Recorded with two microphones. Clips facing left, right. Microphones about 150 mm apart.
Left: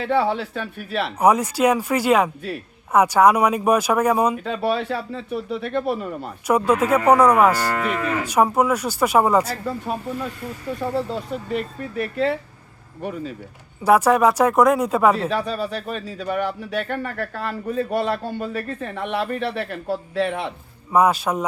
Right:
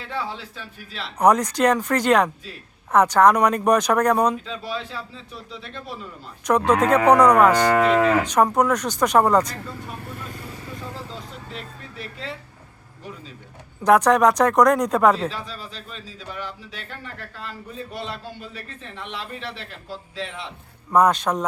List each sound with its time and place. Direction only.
0.0 s speech: 60° left (ahead or behind)
1.2 s speech: 5° left (ahead or behind)
4.4 s speech: 60° left (ahead or behind)
6.7 s speech: 5° left (ahead or behind)
7.7 s moo: 75° right (ahead or behind)
8.2 s speech: 10° left (ahead or behind)
10.8 s speech: 60° left (ahead or behind)
13.8 s speech: 5° left (ahead or behind)
15.3 s speech: 60° left (ahead or behind)
20.9 s speech: 5° left (ahead or behind)